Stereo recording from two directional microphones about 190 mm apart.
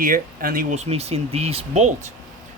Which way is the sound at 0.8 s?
30° right (ahead or behind).